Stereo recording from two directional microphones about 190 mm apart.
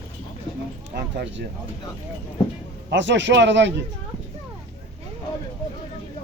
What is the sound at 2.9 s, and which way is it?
Speech, 70° right (ahead or behind).